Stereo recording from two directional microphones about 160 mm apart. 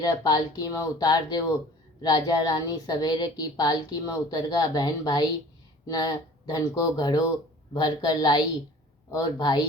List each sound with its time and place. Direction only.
0.0 s a woman's voice: 25° left (ahead or behind)